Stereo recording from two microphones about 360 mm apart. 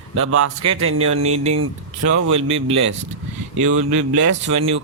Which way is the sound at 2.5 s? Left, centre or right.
Centre.